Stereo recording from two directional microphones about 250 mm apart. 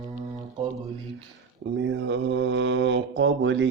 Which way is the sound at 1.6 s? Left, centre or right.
Right.